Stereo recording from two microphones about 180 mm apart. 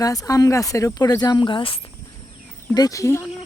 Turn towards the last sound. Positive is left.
turn(degrees=15)  # may be behind; listen again after turning